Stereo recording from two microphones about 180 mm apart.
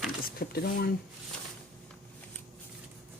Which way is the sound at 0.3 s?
55° left (ahead or behind).